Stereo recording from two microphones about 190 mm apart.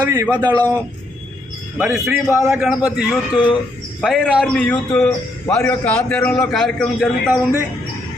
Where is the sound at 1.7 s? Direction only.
5° right (ahead or behind).